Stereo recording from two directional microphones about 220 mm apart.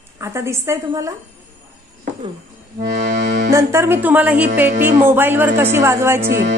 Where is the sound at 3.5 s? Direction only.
15° right (ahead or behind).